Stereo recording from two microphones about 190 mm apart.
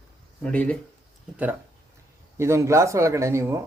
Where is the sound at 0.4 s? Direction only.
5° left (ahead or behind).